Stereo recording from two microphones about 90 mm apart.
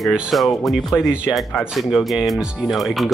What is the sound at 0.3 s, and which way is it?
Speech, centre (ahead or behind).